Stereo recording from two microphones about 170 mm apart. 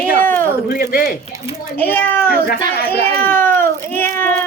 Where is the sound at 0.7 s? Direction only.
60° left (ahead or behind).